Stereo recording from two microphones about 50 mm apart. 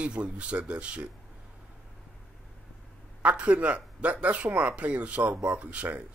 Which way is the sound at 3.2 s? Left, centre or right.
Right.